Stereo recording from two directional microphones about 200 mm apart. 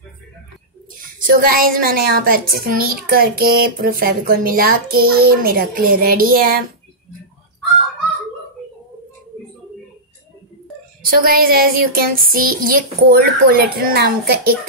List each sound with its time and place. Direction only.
1.2 s a child's voice: 45° right (ahead or behind)
11.1 s a child's voice: 50° right (ahead or behind)